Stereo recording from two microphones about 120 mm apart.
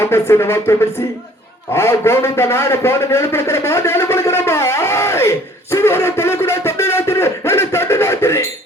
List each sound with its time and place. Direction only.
0.0 s a man's voice: 20° left (ahead or behind)